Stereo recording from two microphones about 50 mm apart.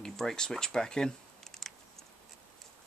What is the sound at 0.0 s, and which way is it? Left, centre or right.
Speech, centre.